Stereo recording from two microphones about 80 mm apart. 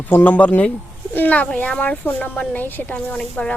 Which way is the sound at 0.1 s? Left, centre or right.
Left.